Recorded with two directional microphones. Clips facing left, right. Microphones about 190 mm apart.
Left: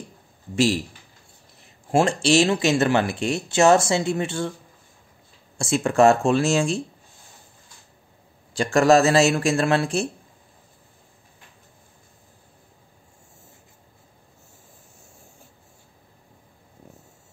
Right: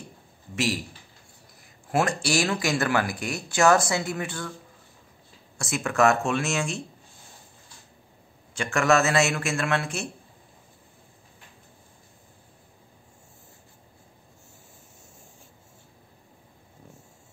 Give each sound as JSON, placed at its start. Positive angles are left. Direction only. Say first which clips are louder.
{"t": 0.6, "sound": "speech", "louder": "left 7 dB", "side_deg": 30}
{"t": 5.6, "sound": "speech", "louder": "left 5 dB", "side_deg": 30}
{"t": 8.5, "sound": "speech", "louder": "left 6 dB", "side_deg": 35}